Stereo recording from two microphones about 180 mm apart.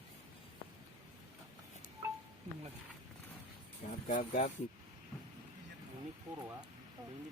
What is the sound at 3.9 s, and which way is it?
Vehicle, 45° left (ahead or behind).